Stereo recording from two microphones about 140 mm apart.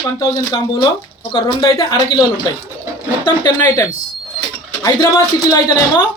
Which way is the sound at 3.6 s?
25° left (ahead or behind).